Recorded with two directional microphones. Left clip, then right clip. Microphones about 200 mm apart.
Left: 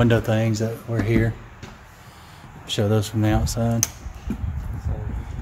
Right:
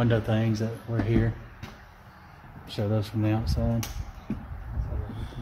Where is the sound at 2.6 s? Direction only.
25° left (ahead or behind).